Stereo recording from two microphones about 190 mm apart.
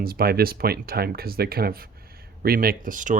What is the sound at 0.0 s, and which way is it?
Speech, 50° right (ahead or behind).